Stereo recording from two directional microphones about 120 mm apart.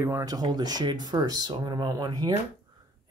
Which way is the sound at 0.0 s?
30° right (ahead or behind).